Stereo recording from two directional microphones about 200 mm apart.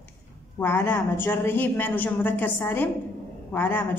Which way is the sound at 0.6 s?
10° left (ahead or behind).